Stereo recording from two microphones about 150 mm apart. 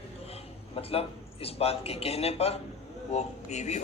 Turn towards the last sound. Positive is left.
turn(degrees=50)  # may be behind; listen again after turning